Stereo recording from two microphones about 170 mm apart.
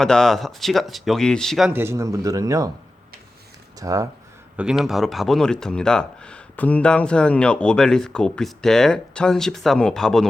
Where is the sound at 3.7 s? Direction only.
20° right (ahead or behind).